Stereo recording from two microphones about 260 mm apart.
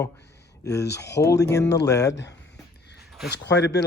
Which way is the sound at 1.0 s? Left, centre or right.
Left.